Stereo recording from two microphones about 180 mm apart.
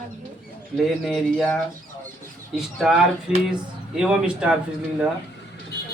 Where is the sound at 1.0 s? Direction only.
Centre (ahead or behind).